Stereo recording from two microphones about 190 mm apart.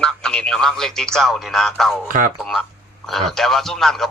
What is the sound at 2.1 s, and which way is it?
Speech, 45° right (ahead or behind).